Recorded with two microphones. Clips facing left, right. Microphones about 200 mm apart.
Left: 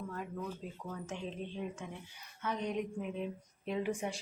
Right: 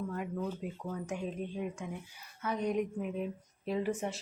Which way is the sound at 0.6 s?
65° right (ahead or behind).